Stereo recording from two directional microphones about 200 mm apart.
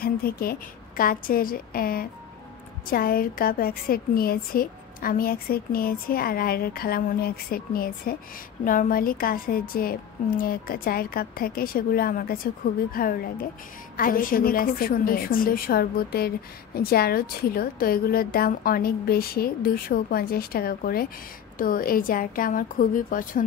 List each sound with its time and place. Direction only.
0.0 s a woman's voice: 50° left (ahead or behind)